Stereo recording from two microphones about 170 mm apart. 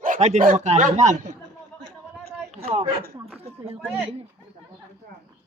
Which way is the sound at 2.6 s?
35° right (ahead or behind).